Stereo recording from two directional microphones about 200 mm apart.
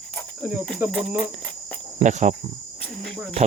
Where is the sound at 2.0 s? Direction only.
35° right (ahead or behind).